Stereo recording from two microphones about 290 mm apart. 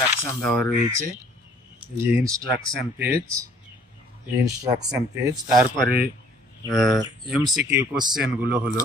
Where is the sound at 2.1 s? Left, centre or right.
Centre.